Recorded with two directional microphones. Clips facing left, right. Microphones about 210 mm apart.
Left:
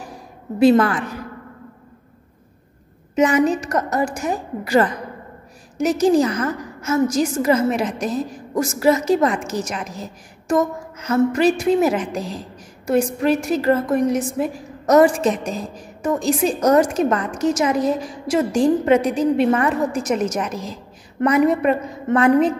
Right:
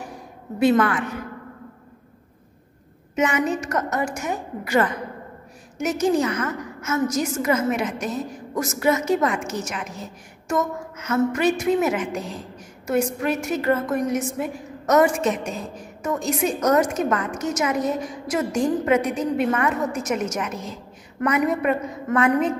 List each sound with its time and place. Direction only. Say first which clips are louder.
0.6 s a woman's voice: left 4 dB; 35° left (ahead or behind)
3.2 s a woman's voice: left 5 dB; 35° left (ahead or behind)